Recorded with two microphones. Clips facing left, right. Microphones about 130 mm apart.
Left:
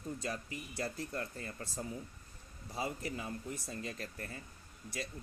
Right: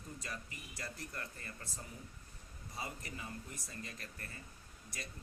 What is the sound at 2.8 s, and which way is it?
Speech, 35° left (ahead or behind).